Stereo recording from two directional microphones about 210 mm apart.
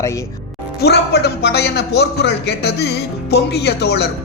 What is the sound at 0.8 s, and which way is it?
A man's voice, 50° left (ahead or behind).